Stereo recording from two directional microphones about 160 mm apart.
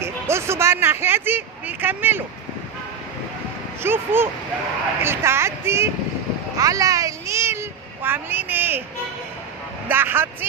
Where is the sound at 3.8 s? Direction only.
15° right (ahead or behind).